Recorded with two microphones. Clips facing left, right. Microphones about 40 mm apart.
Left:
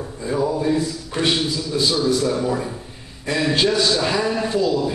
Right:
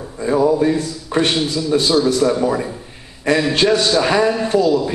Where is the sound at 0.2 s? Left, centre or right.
Right.